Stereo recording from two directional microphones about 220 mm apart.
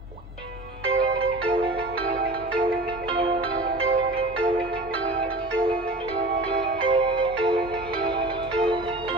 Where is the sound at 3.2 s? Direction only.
25° right (ahead or behind).